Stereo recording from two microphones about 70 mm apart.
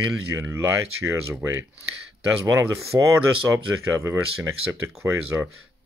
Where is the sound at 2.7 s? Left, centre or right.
Right.